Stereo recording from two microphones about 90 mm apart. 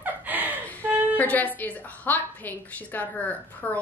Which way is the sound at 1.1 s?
20° left (ahead or behind).